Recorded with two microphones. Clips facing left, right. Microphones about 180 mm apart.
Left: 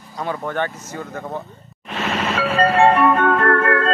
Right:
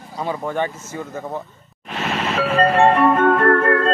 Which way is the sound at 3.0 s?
25° right (ahead or behind).